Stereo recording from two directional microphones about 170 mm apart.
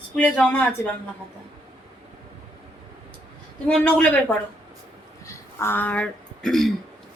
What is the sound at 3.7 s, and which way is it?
Speech, 10° left (ahead or behind).